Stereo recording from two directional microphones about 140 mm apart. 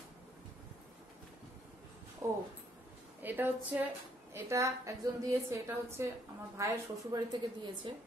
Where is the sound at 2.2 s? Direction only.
20° right (ahead or behind).